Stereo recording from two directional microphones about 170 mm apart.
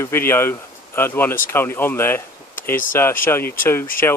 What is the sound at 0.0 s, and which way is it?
Speech, 15° left (ahead or behind).